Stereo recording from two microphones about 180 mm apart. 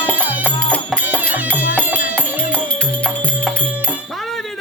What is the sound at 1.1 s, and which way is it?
Music, 10° right (ahead or behind).